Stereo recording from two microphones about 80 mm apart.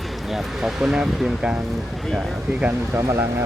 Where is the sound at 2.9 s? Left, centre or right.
Right.